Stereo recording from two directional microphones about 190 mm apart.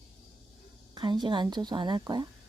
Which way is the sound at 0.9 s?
25° right (ahead or behind).